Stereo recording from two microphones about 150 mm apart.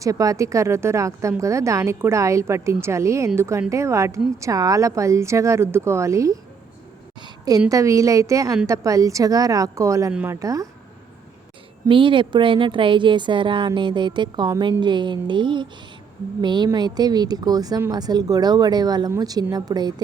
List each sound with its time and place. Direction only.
0.0 s speech: 20° right (ahead or behind)
7.2 s a sound: 25° right (ahead or behind)
7.7 s speech: 20° right (ahead or behind)
10.1 s a woman's voice: 10° right (ahead or behind)
10.4 s speech: 20° right (ahead or behind)
11.9 s a woman's voice: 35° right (ahead or behind)